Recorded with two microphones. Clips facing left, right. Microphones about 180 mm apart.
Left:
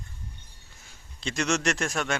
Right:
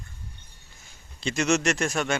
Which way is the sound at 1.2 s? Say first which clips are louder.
Right 4 dB; centre (ahead or behind).